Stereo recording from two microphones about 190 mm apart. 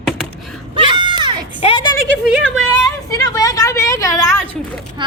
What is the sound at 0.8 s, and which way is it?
Children playing, 25° right (ahead or behind).